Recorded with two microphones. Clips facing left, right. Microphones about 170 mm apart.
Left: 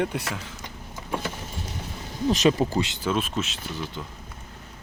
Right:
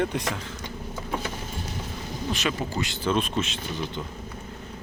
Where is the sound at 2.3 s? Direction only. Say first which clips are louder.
Left 8 dB; 40° left (ahead or behind).